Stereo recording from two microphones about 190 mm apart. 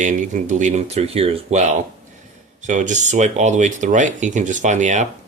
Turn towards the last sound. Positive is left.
turn(degrees=-40)  # may be behind; listen again after turning